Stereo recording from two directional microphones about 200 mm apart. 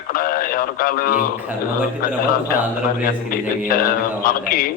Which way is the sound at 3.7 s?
45° left (ahead or behind).